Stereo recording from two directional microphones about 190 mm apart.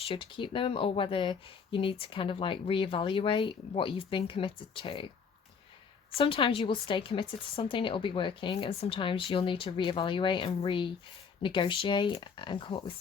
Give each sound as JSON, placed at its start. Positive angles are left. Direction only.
{"t": 0.1, "sound": "speech", "side_deg": 25}
{"t": 6.1, "sound": "speech", "side_deg": 30}